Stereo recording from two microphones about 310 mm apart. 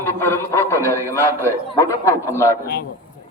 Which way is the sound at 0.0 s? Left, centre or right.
Centre.